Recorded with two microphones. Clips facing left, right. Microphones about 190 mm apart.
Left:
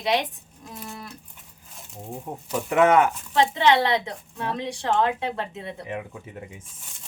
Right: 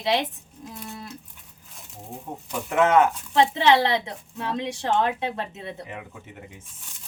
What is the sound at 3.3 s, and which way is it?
A woman's voice, 25° right (ahead or behind).